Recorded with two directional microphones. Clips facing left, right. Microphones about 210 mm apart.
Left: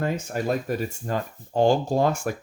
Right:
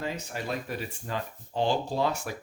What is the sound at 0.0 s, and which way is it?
Speech, 50° left (ahead or behind).